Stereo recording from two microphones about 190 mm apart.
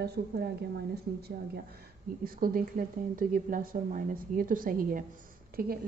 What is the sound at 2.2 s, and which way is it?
A woman's voice, 50° right (ahead or behind).